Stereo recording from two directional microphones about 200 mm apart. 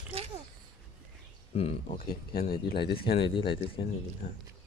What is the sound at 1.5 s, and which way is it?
Speech, 30° left (ahead or behind).